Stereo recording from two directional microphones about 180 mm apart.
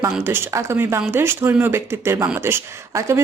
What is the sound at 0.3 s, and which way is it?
Speech, 15° right (ahead or behind).